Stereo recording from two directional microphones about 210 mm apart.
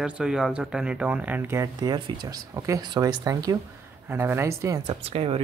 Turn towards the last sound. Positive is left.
turn(degrees=-25)  # may be behind; listen again after turning